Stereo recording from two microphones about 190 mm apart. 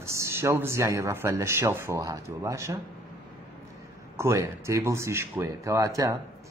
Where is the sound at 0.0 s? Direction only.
15° right (ahead or behind).